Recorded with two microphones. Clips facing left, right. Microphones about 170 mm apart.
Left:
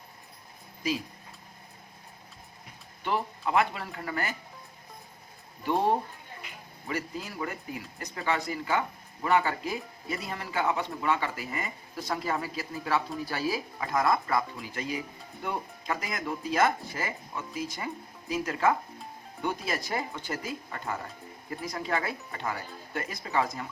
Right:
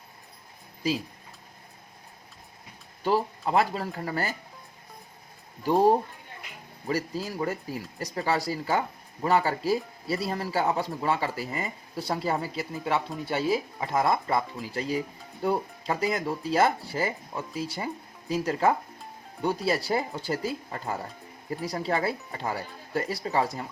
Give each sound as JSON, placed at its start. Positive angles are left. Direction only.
{"t": 3.0, "sound": "speech", "side_deg": -35}
{"t": 5.6, "sound": "speech", "side_deg": -40}